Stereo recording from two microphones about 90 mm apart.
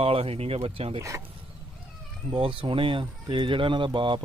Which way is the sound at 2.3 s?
70° right (ahead or behind).